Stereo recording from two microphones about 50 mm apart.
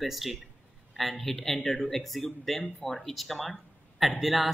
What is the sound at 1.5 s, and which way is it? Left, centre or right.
Speech, centre.